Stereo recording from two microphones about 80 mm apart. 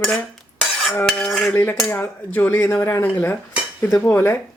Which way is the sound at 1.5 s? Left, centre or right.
Left.